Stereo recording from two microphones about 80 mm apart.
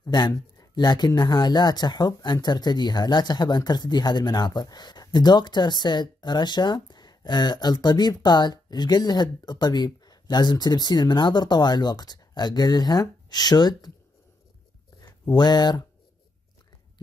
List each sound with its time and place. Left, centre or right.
0.1 s speech: left
15.0 s speech: left